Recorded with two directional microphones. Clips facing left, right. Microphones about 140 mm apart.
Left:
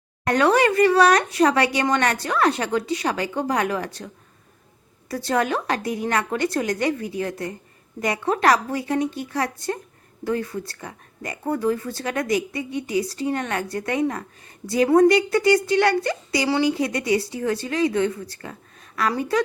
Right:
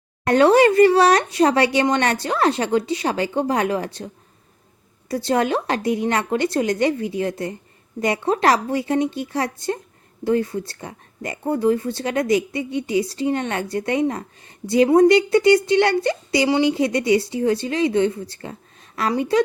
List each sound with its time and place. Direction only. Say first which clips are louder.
0.3 s speech: right 4 dB; 30° right (ahead or behind)